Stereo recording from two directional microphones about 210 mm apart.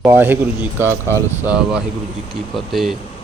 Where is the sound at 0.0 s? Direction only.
10° right (ahead or behind).